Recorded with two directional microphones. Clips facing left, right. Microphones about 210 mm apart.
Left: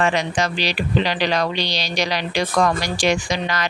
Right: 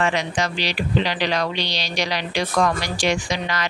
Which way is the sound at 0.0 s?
40° left (ahead or behind).